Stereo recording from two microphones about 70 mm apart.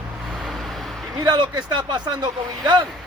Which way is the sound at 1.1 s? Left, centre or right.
Right.